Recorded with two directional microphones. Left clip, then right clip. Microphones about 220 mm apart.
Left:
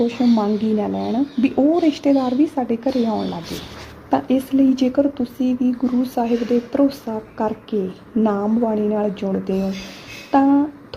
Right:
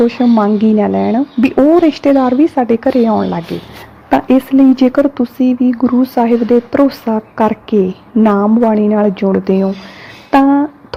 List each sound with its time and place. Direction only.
0.1 s a woman's voice: 20° right (ahead or behind)
9.2 s a woman's voice: 35° right (ahead or behind)